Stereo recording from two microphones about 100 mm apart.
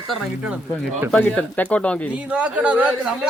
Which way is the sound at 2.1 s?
10° right (ahead or behind).